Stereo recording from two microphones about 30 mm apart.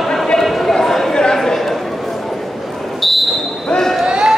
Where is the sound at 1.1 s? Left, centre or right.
Left.